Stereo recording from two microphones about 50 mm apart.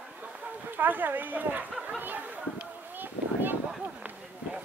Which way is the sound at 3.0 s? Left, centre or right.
Right.